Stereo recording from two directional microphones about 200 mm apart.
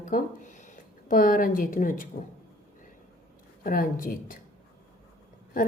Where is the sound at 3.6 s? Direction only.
45° left (ahead or behind).